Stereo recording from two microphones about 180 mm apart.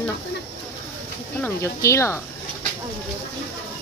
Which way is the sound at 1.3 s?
15° left (ahead or behind).